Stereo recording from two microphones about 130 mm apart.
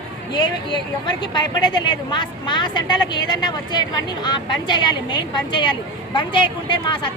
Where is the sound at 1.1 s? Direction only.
35° left (ahead or behind).